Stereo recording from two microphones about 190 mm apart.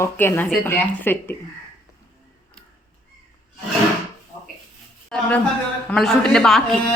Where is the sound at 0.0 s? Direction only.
10° left (ahead or behind).